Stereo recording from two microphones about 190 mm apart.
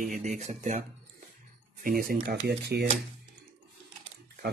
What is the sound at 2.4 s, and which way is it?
Mantra, 60° right (ahead or behind).